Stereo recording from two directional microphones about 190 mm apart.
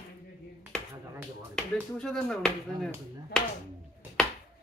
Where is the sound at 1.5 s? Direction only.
5° left (ahead or behind).